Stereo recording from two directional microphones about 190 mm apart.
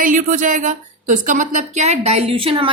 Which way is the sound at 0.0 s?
40° right (ahead or behind).